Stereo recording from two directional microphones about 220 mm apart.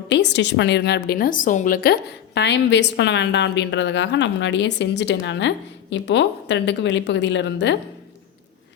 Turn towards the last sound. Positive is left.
turn(degrees=55)  # may be behind; listen again after turning